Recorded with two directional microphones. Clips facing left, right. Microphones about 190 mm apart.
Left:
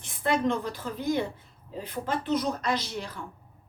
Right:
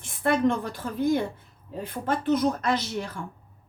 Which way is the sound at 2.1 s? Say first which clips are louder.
Right 5 dB; 50° right (ahead or behind).